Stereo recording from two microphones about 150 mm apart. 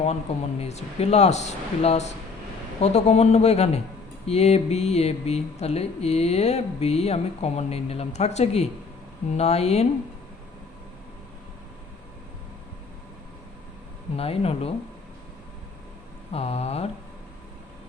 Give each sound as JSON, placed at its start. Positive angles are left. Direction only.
{"t": 0.6, "sound": "speech", "side_deg": 45}
{"t": 14.2, "sound": "speech", "side_deg": 40}
{"t": 16.3, "sound": "speech", "side_deg": 45}